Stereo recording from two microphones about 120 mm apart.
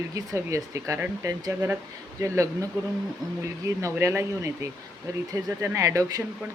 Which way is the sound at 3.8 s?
25° right (ahead or behind).